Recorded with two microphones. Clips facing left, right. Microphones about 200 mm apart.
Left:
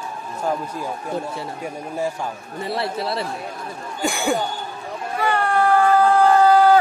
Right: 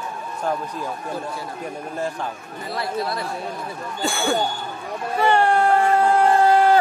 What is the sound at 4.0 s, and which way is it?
Speech, 15° left (ahead or behind).